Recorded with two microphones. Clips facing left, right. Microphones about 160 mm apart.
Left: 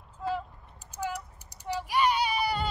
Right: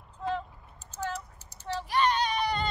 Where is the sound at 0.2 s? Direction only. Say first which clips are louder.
Even; 5° left (ahead or behind).